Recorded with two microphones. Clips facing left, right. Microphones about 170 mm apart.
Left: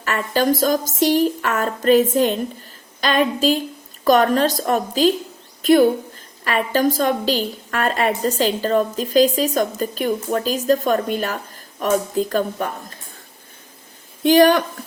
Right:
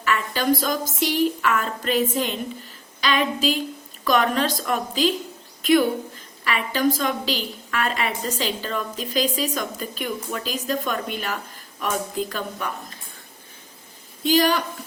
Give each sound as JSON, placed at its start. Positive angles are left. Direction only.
{"t": 0.0, "sound": "a woman's voice", "side_deg": 45}
{"t": 14.3, "sound": "a woman's voice", "side_deg": 60}